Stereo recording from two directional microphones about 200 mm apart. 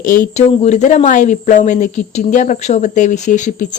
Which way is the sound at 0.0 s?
40° left (ahead or behind).